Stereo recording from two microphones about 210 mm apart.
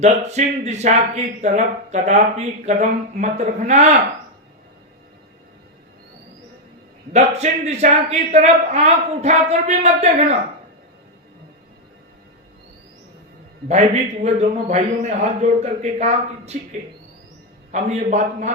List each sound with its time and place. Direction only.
0.0 s speech: 30° right (ahead or behind)
7.1 s speech: 30° right (ahead or behind)
13.7 s speech: 30° right (ahead or behind)
17.7 s speech: 35° right (ahead or behind)